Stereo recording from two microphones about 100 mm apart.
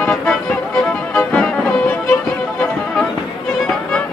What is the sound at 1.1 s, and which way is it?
Music, 10° left (ahead or behind).